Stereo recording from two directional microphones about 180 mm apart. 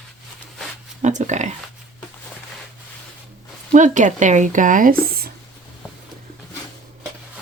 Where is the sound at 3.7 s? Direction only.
45° right (ahead or behind).